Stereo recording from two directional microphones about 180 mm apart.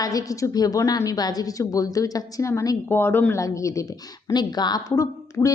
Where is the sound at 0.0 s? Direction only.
20° left (ahead or behind).